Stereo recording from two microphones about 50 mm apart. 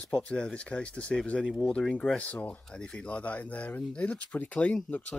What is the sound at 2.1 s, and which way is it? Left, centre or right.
Speech, left.